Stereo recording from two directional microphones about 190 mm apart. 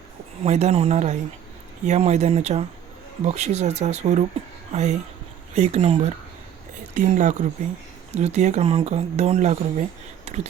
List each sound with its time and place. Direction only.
0.4 s speech: 35° right (ahead or behind)